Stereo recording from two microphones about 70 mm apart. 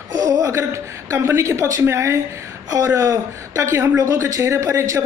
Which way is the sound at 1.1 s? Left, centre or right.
Right.